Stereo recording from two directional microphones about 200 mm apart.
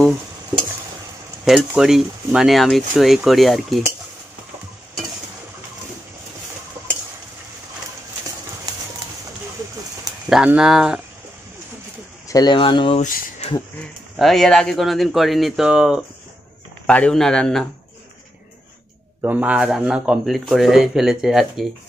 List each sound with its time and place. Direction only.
0.5 s stir: 20° right (ahead or behind)
1.4 s speech: centre (ahead or behind)
10.3 s speech: 5° right (ahead or behind)
12.3 s speech: 20° left (ahead or behind)
13.0 s a sound: 40° left (ahead or behind)
14.1 s speech: centre (ahead or behind)
19.2 s speech: 5° right (ahead or behind)